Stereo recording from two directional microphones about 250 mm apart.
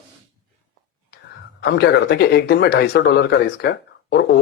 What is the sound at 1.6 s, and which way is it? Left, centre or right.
A man's voice, left.